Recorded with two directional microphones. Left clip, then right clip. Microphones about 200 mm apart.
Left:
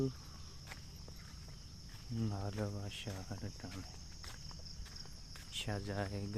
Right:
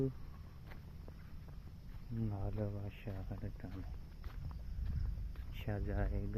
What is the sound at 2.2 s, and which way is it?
Cricket, 30° left (ahead or behind).